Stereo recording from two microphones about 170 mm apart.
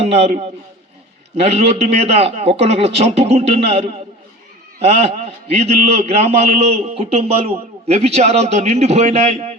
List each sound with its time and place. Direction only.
0.0 s a man's voice: 40° right (ahead or behind)